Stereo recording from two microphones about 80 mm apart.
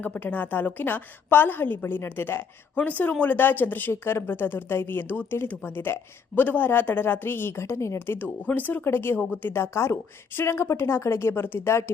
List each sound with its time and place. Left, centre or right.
0.0 s a woman's voice: centre